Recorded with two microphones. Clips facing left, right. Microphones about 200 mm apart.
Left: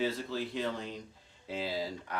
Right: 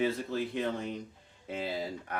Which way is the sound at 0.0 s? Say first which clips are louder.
Right 3 dB; 55° right (ahead or behind).